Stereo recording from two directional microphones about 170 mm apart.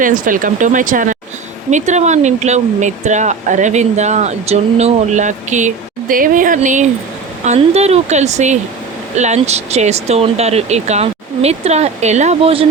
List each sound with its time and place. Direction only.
0.0 s speech: 50° right (ahead or behind); by 12.6 s 35° right (ahead or behind)